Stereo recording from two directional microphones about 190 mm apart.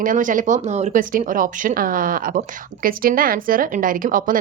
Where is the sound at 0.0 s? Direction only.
45° right (ahead or behind).